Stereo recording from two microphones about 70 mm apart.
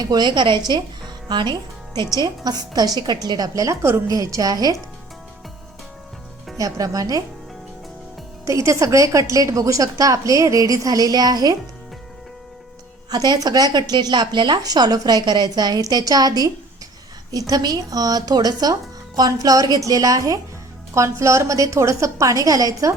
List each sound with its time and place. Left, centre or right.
0.0 s a woman's voice: right
0.7 s music: right
2.0 s a woman's voice: right
4.1 s speech: right
6.6 s speech: right
8.4 s a woman's voice: right
13.1 s a woman's voice: right
20.9 s a woman's voice: right